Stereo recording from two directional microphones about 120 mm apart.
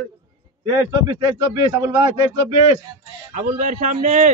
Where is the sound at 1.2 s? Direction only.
30° right (ahead or behind).